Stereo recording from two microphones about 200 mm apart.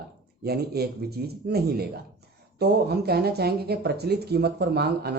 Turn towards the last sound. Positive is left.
turn(degrees=-55)  # may be behind; listen again after turning